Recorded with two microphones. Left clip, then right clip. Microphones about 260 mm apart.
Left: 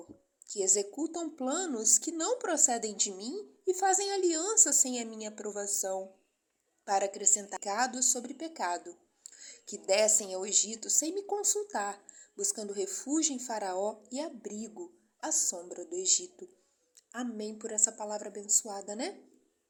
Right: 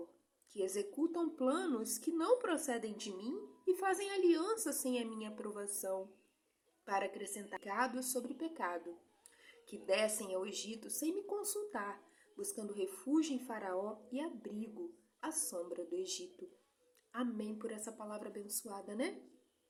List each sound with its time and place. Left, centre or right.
0.4 s a woman's voice: centre